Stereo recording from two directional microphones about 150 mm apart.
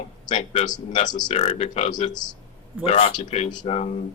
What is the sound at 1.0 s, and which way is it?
Speech, 30° left (ahead or behind).